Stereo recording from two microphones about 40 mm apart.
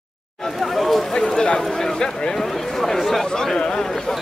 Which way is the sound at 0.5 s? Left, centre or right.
Centre.